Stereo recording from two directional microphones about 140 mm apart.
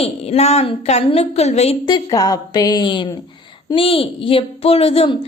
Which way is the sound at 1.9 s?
25° left (ahead or behind).